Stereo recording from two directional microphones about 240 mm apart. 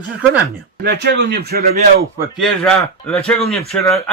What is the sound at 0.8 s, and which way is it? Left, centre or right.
A man's voice, right.